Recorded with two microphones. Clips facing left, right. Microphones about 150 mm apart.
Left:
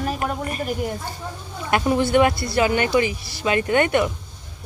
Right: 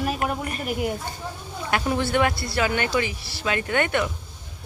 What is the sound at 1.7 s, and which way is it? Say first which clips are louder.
Speech: left 5 dB; 15° left (ahead or behind).